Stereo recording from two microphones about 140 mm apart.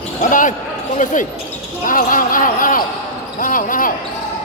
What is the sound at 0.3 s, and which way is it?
Speech, 70° left (ahead or behind).